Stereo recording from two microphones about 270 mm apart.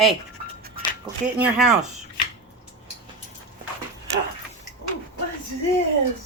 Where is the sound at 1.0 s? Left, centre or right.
Centre.